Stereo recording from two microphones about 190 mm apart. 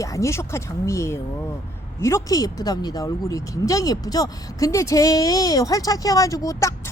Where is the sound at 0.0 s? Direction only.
15° left (ahead or behind).